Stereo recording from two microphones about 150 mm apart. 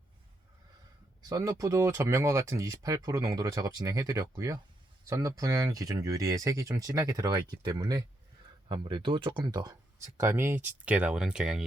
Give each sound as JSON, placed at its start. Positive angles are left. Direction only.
{"t": 1.3, "sound": "speech", "side_deg": -20}